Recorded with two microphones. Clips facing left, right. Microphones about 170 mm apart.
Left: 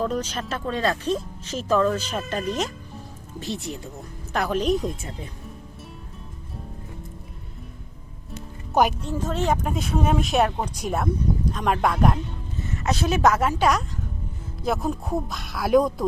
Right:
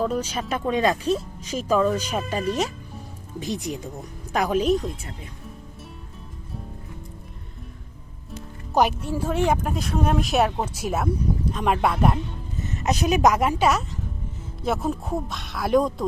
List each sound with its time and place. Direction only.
0.0 s speech: 10° right (ahead or behind)
8.7 s speech: centre (ahead or behind)
9.6 s speech: centre (ahead or behind)
12.5 s speech: 20° right (ahead or behind); by 16.0 s centre (ahead or behind)